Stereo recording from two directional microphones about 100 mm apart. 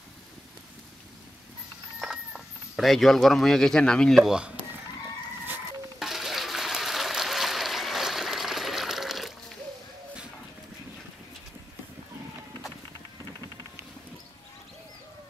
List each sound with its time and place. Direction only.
2.0 s speech: 5° right (ahead or behind)
4.2 s speech: 10° right (ahead or behind)
5.9 s a sound: 5° right (ahead or behind)